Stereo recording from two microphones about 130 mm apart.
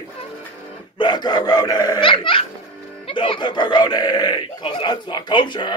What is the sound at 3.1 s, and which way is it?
Speech, 40° left (ahead or behind).